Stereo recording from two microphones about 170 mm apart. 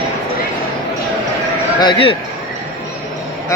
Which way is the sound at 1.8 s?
30° left (ahead or behind).